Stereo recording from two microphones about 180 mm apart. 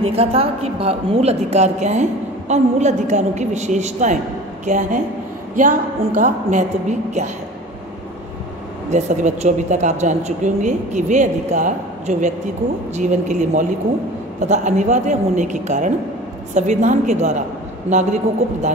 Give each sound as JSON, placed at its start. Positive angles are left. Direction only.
{"t": 0.0, "sound": "a woman's voice", "side_deg": -35}
{"t": 8.9, "sound": "a woman's voice", "side_deg": -40}